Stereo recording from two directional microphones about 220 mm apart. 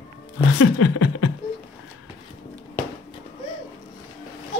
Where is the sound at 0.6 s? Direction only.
80° left.